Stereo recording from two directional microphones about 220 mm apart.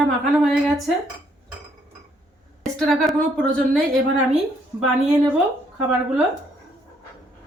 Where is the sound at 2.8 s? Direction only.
Centre (ahead or behind).